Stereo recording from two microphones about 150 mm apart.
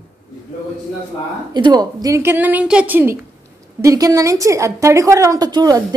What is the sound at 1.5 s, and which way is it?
A woman's voice, 30° right (ahead or behind).